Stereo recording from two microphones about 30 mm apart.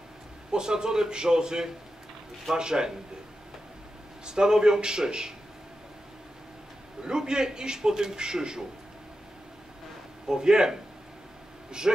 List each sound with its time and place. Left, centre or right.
0.5 s a man's voice: right
4.3 s a man's voice: right
7.1 s a man's voice: right
10.2 s a man's voice: right